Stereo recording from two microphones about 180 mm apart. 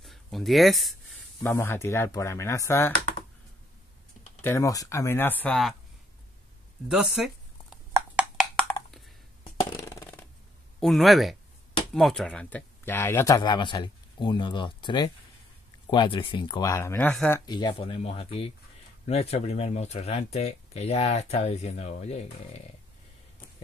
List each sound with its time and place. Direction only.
0.0 s speech: centre (ahead or behind)
1.4 s speech: 10° left (ahead or behind)
4.4 s speech: 15° left (ahead or behind)
6.9 s a sound: 5° right (ahead or behind)
9.8 s a sound: 15° left (ahead or behind)
10.8 s speech: centre (ahead or behind)
17.1 s speech: 5° left (ahead or behind)
17.5 s speech: 25° left (ahead or behind)